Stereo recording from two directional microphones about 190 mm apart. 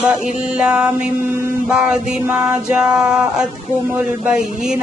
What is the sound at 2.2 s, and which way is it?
Music, 5° right (ahead or behind).